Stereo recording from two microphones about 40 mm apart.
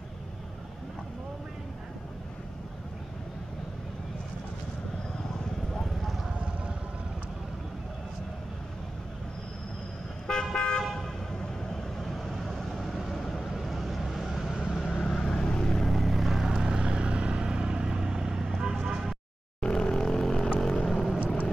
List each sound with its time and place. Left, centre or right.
5.7 s clip-clop: centre
10.2 s car: centre
12.0 s vehicle: centre
14.9 s vehicle: left
15.1 s vehicle: centre
15.9 s vehicle: centre
16.6 s vehicle: right
19.6 s vehicle: centre